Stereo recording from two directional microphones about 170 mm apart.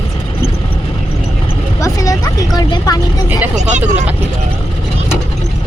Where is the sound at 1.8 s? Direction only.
20° left (ahead or behind).